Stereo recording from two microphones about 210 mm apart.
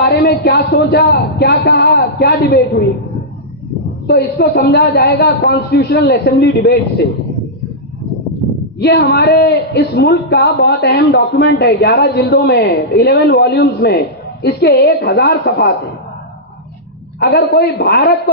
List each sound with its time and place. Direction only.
0.0 s a woman's voice: 50° left (ahead or behind)
4.4 s a woman's voice: 50° left (ahead or behind)
8.7 s a woman's voice: 55° left (ahead or behind)
17.3 s a woman's voice: 45° left (ahead or behind)